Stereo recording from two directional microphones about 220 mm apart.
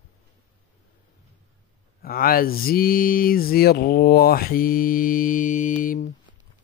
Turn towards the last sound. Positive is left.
turn(degrees=35)  # may be behind; listen again after turning